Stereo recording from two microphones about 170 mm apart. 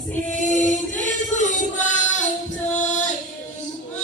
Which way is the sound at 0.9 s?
45° left (ahead or behind).